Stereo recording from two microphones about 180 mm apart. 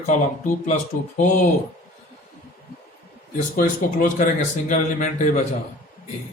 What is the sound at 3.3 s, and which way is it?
Speech, 50° left (ahead or behind).